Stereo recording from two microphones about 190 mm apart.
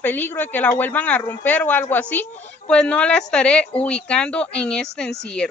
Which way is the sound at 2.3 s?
35° left (ahead or behind).